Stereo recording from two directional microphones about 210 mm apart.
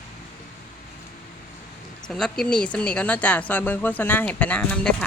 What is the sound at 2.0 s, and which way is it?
A woman's voice, centre (ahead or behind).